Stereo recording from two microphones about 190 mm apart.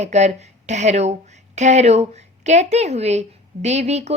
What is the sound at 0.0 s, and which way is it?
A woman's voice, 35° right (ahead or behind).